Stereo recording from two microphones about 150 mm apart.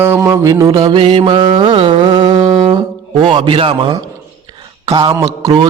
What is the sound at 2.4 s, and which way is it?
Music, 35° right (ahead or behind).